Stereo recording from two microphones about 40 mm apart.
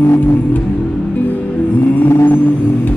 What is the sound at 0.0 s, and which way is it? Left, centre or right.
Music, left.